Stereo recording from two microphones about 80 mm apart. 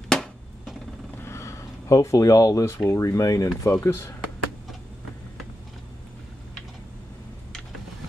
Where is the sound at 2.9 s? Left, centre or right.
Left.